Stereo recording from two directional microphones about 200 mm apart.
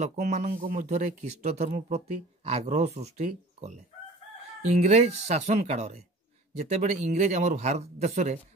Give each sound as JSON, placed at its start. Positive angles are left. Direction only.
{"t": 0.0, "sound": "speech", "side_deg": -35}